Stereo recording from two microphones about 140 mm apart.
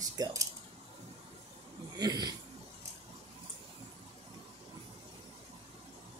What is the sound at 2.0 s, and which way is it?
Speech, 30° right (ahead or behind).